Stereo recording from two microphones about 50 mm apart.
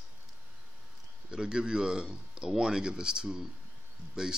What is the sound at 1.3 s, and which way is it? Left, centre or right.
Speech, centre.